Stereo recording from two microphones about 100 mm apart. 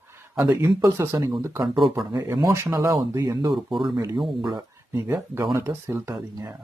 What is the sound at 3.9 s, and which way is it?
Speech, 30° right (ahead or behind).